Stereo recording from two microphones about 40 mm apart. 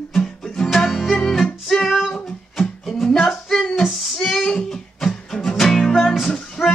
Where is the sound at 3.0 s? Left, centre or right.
Centre.